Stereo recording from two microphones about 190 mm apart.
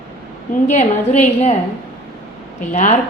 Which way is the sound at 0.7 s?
40° left (ahead or behind).